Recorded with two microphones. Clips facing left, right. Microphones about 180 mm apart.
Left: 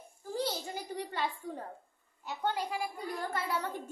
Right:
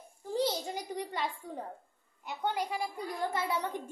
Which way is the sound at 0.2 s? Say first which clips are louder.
Right 4 dB; 20° right (ahead or behind).